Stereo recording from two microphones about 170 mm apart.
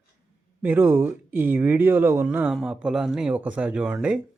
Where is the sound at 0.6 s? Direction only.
10° right (ahead or behind).